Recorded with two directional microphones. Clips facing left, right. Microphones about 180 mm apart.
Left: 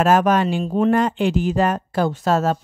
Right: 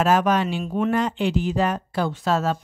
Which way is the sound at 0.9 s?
50° left (ahead or behind).